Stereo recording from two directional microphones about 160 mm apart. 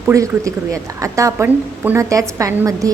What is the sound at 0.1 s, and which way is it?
A woman's voice, 20° right (ahead or behind).